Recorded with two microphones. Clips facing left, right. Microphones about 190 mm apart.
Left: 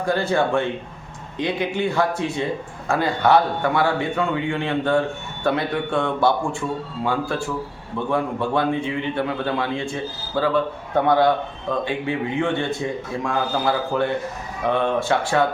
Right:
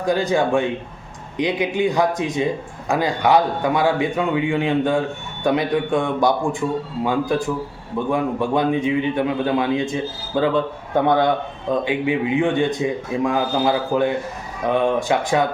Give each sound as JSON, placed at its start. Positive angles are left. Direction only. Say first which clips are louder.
{"t": 0.0, "sound": "a man's voice", "louder": "right 2 dB", "side_deg": -15}
{"t": 11.9, "sound": "a man's voice", "louder": "right 4 dB", "side_deg": -15}